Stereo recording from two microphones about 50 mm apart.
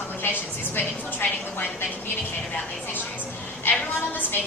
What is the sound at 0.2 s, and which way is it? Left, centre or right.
Speech, left.